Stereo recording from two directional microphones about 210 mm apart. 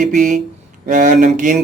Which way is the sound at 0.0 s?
40° right (ahead or behind).